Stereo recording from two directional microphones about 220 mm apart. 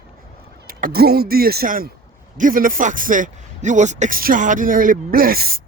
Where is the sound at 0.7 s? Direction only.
40° right (ahead or behind).